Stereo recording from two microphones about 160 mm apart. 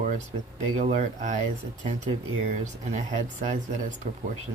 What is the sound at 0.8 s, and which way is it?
Speech, 45° right (ahead or behind).